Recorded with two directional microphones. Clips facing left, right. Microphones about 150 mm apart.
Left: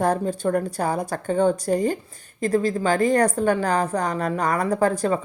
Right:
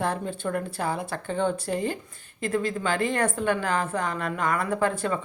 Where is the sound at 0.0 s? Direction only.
40° left (ahead or behind).